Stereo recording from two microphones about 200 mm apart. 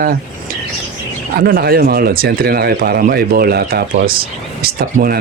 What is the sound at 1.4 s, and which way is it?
Speech, 50° right (ahead or behind).